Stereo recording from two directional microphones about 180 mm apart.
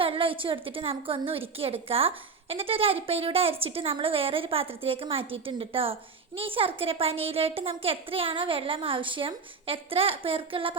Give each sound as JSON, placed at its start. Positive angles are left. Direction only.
{"t": 0.0, "sound": "a woman's voice", "side_deg": -30}